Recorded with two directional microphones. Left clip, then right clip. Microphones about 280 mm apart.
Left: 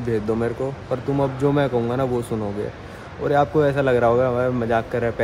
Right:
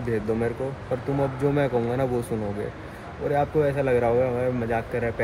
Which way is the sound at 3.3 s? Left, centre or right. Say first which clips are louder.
Left 5 dB; centre.